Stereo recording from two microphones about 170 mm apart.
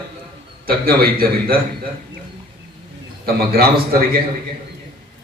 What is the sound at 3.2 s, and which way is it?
Speech, 65° right (ahead or behind).